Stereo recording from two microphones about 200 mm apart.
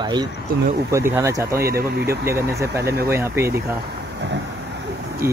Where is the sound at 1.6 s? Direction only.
50° right (ahead or behind).